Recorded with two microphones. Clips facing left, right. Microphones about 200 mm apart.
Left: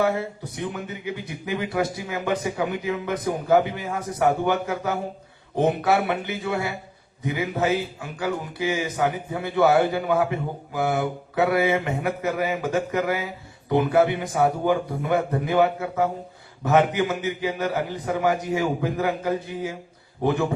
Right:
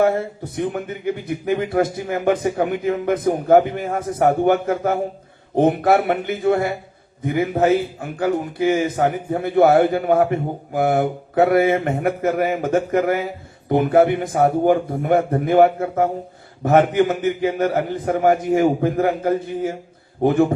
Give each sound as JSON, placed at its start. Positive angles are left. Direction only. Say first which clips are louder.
{"t": 0.0, "sound": "a man's voice", "louder": "right 5 dB", "side_deg": -50}